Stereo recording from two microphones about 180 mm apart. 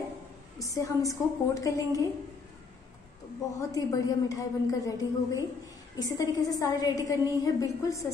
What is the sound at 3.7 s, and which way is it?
A woman's voice, 20° left (ahead or behind).